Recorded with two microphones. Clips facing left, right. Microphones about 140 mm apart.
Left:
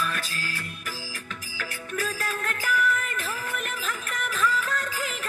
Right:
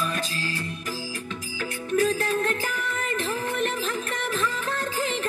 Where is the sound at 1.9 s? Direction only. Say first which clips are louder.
Right 9 dB; 25° right (ahead or behind).